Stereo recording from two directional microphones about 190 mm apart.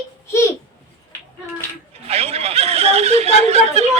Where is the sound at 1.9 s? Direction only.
35° right (ahead or behind).